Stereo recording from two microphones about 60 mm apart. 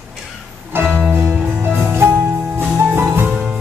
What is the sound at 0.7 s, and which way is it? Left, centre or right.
Music, right.